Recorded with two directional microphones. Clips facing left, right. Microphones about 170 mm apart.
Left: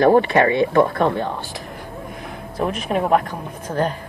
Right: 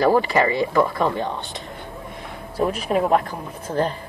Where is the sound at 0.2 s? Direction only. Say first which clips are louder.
Left 3 dB; 60° left (ahead or behind).